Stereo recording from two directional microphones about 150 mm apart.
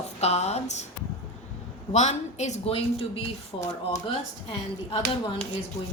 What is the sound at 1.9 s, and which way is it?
Speech, 50° left (ahead or behind).